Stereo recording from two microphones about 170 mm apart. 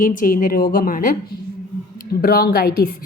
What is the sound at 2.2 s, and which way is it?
Speech, 65° left (ahead or behind).